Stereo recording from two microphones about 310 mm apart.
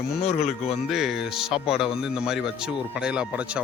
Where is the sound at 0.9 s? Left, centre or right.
Centre.